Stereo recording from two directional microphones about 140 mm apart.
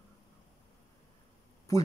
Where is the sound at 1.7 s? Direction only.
20° left (ahead or behind).